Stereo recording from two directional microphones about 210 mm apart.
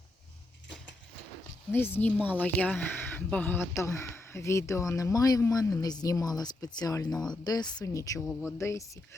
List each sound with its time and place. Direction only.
1.7 s speech: 10° left (ahead or behind)
7.1 s speech: 5° left (ahead or behind)
7.4 s speech: 20° left (ahead or behind)
8.3 s speech: 5° right (ahead or behind)
8.5 s speech: 15° left (ahead or behind)